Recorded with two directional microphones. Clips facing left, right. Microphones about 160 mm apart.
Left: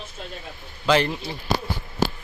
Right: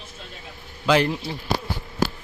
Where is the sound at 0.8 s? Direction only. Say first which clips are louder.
Right 1 dB; 5° right (ahead or behind).